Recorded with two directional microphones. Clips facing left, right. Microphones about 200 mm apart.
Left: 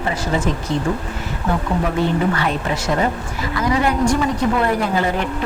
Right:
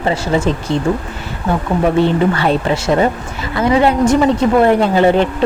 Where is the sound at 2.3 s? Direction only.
30° right (ahead or behind).